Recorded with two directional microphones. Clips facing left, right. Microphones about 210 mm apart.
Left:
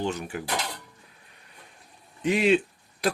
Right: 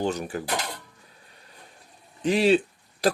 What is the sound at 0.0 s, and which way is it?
Speech, 40° right (ahead or behind).